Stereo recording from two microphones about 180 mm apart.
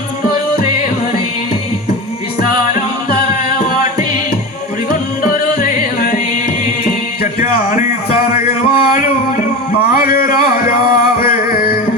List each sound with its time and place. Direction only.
4.9 s music: 50° left (ahead or behind)
7.2 s music: 50° left (ahead or behind)
8.7 s a sound: 50° left (ahead or behind)